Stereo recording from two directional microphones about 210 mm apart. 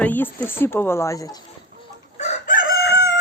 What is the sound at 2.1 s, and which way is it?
Chicken, 35° left (ahead or behind).